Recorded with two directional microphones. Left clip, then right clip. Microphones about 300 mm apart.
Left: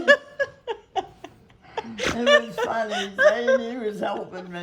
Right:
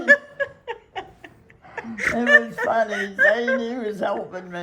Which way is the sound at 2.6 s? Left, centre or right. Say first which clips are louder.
Right 4 dB; centre.